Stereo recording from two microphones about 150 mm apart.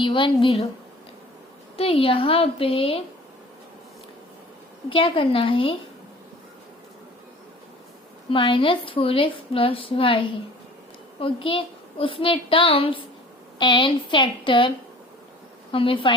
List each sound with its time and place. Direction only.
0.0 s a woman's voice: 30° left (ahead or behind)
1.7 s a woman's voice: 40° left (ahead or behind)
4.9 s a woman's voice: 35° left (ahead or behind)
8.3 s a woman's voice: 35° left (ahead or behind)
15.7 s a woman's voice: 35° left (ahead or behind)